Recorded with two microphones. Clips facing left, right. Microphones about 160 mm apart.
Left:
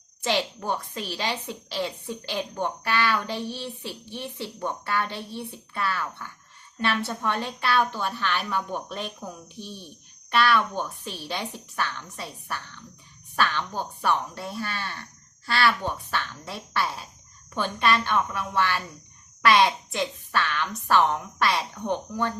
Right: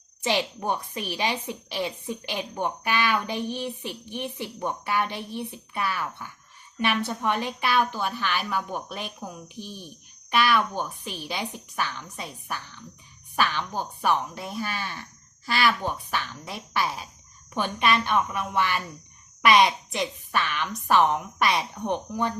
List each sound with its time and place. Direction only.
0.6 s a woman's voice: 15° right (ahead or behind)